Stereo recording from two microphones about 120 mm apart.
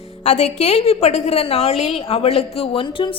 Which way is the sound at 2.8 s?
45° left (ahead or behind).